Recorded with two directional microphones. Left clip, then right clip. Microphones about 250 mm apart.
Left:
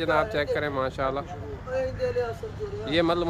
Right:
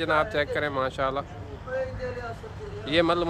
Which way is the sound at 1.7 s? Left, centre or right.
Left.